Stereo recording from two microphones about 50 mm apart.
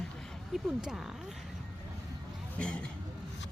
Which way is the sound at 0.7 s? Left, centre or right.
Centre.